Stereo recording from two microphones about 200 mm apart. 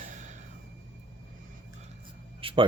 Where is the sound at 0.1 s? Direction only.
35° right (ahead or behind).